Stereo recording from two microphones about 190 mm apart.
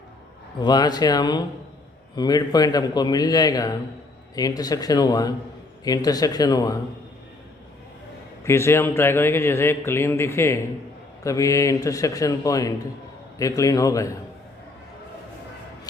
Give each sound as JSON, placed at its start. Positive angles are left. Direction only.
{"t": 0.6, "sound": "a man's voice", "side_deg": 20}
{"t": 8.4, "sound": "a man's voice", "side_deg": 15}